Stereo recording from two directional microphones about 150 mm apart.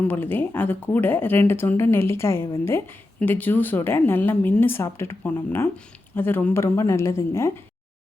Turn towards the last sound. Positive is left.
turn(degrees=20)  # may be behind; listen again after turning